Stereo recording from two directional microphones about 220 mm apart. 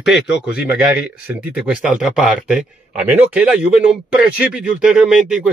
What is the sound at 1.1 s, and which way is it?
Speech, 5° right (ahead or behind).